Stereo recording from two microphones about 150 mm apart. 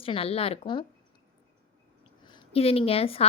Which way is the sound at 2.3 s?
40° left (ahead or behind).